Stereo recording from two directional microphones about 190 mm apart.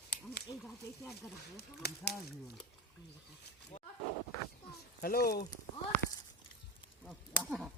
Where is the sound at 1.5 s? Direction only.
60° left (ahead or behind).